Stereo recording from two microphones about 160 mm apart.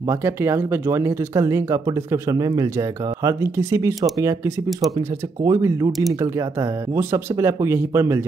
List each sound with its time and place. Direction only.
0.1 s speech: 15° right (ahead or behind)
5.4 s speech: 20° right (ahead or behind)
5.9 s speech: centre (ahead or behind)
7.0 s speech: 15° right (ahead or behind)